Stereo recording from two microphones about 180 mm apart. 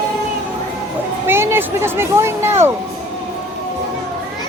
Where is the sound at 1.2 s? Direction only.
15° right (ahead or behind).